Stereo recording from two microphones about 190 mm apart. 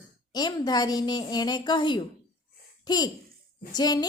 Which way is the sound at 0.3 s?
20° left (ahead or behind).